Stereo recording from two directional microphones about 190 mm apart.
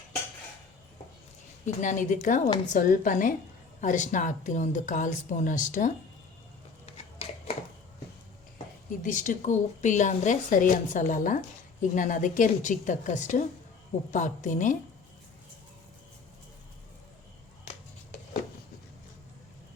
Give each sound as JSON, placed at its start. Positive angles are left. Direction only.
{"t": 1.6, "sound": "a woman's voice", "side_deg": 40}
{"t": 9.0, "sound": "speech", "side_deg": 40}